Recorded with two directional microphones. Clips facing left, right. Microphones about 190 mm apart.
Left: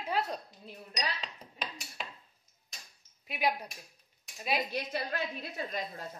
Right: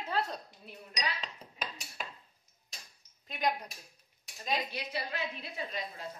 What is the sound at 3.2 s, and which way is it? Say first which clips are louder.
Speech: left 1 dB; 10° left (ahead or behind).